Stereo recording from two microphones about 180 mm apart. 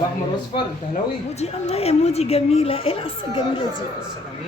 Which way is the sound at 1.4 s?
35° left (ahead or behind).